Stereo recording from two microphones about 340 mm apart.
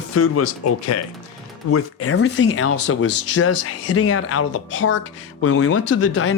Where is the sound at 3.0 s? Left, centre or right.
Left.